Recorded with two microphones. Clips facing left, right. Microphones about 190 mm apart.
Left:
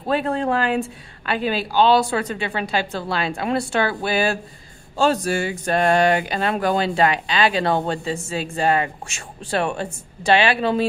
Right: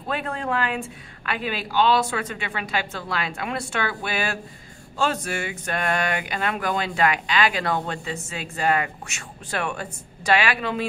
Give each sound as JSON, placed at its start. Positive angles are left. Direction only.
{"t": 0.0, "sound": "speech", "side_deg": 35}